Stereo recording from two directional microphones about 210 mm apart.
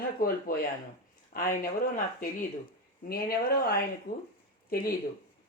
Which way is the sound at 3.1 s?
45° left (ahead or behind).